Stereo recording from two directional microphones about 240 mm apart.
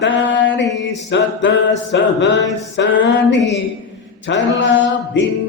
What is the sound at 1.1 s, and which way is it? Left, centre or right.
Mantra, left.